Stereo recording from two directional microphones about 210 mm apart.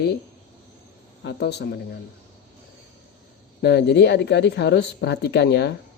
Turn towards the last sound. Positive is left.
turn(degrees=55)  # may be behind; listen again after turning